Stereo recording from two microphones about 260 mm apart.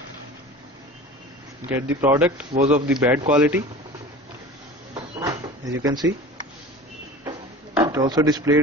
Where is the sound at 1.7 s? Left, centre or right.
Centre.